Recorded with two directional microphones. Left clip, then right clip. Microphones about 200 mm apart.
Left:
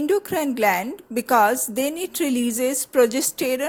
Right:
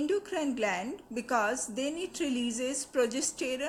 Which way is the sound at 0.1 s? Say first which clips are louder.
Left 9 dB; 40° left (ahead or behind).